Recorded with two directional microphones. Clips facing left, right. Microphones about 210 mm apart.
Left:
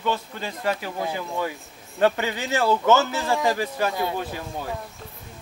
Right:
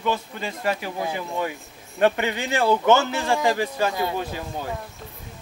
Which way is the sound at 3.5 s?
20° right (ahead or behind).